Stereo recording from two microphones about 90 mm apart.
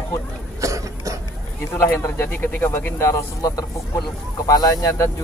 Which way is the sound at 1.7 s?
30° left (ahead or behind).